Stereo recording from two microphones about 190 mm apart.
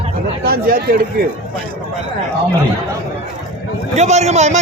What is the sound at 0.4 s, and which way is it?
Speech, 50° right (ahead or behind).